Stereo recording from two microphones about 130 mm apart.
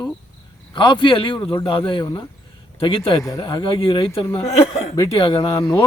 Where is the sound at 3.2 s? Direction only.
25° left (ahead or behind).